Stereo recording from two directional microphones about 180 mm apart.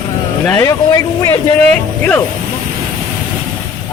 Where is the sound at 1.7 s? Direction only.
10° left (ahead or behind).